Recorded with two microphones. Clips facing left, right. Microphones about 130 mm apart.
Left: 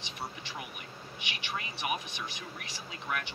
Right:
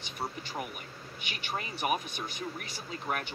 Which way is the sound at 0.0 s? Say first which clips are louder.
Right 3 dB; 40° right (ahead or behind).